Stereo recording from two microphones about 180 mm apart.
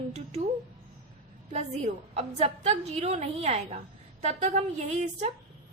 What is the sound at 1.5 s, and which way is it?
A woman's voice, 35° right (ahead or behind).